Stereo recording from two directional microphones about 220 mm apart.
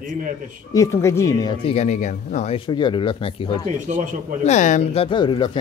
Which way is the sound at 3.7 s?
35° right (ahead or behind).